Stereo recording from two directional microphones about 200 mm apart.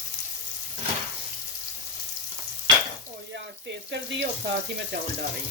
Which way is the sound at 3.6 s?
60° right (ahead or behind).